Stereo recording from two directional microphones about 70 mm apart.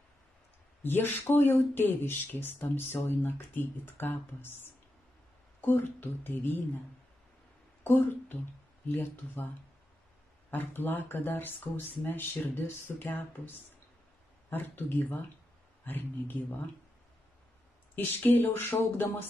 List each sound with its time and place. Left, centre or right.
0.8 s speech: left
5.8 s speech: left
7.8 s speech: left
10.5 s speech: left
14.5 s speech: left
17.9 s speech: left